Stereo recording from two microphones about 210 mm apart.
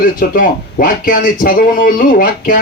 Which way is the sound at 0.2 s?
40° left (ahead or behind).